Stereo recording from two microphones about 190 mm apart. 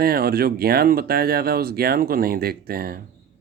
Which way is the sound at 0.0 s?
55° right (ahead or behind).